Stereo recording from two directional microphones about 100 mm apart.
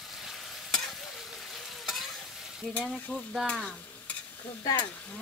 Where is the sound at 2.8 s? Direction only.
Centre (ahead or behind).